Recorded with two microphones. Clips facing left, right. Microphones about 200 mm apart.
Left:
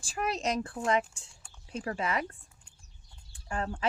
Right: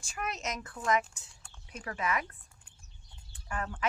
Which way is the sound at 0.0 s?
30° left (ahead or behind).